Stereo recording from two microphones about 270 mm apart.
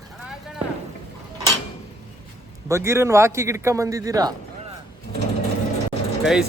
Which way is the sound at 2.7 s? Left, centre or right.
Centre.